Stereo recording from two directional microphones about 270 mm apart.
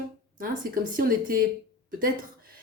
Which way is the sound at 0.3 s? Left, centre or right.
Right.